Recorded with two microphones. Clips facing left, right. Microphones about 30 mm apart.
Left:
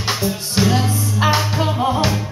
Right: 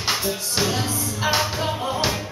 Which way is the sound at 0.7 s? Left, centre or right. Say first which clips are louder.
Left 6 dB; left.